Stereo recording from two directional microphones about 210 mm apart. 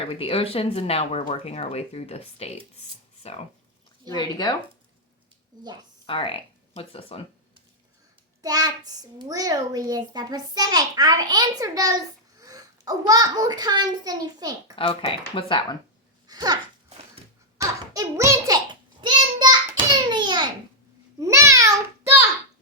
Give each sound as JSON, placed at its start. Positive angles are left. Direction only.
{"t": 0.0, "sound": "speech", "side_deg": 25}
{"t": 6.1, "sound": "speech", "side_deg": 25}
{"t": 8.4, "sound": "a child's voice", "side_deg": -15}
{"t": 14.8, "sound": "speech", "side_deg": 25}
{"t": 16.2, "sound": "babbling", "side_deg": -20}
{"t": 17.6, "sound": "hands", "side_deg": -15}
{"t": 21.2, "sound": "babbling", "side_deg": -15}